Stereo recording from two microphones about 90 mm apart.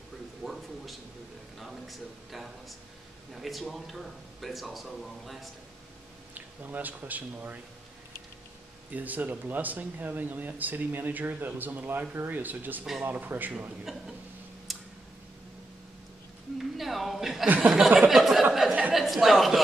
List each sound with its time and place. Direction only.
0.4 s a sound: centre (ahead or behind)
3.3 s speech: centre (ahead or behind)
6.3 s speech: 20° right (ahead or behind)
8.9 s speech: 20° right (ahead or behind)
13.9 s speech: 5° right (ahead or behind)
14.7 s tick-tock: centre (ahead or behind)
16.5 s speech: centre (ahead or behind)
17.6 s a sound: 5° right (ahead or behind)
18.7 s a sound: 15° right (ahead or behind)
18.9 s speech: centre (ahead or behind)